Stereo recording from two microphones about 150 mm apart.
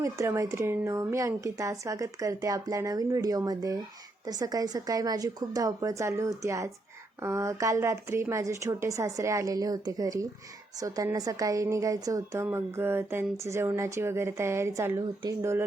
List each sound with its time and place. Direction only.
0.0 s a woman's voice: 20° right (ahead or behind)